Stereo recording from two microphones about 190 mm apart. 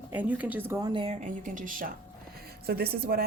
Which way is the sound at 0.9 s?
25° right (ahead or behind).